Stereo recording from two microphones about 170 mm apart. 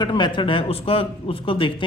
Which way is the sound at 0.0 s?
30° left (ahead or behind).